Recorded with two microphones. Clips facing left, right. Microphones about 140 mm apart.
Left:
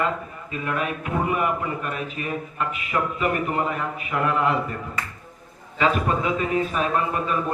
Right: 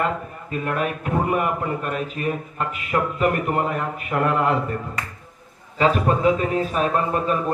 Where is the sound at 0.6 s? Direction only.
40° right (ahead or behind).